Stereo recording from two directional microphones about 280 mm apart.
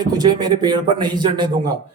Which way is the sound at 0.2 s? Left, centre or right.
Centre.